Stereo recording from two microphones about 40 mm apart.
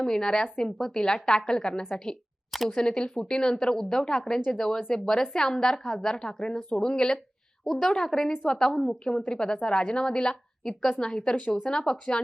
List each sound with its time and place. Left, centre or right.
0.0 s a woman's voice: centre
7.7 s a woman's voice: centre
11.3 s speech: left
11.6 s speech: centre